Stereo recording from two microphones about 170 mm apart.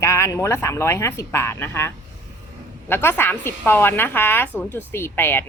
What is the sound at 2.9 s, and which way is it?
Speech, 15° left (ahead or behind).